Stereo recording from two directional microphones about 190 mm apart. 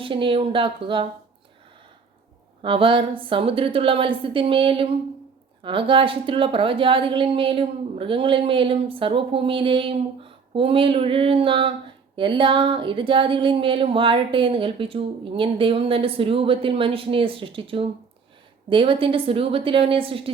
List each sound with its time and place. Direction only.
0.0 s a woman's voice: 25° right (ahead or behind)
2.6 s a woman's voice: 30° right (ahead or behind)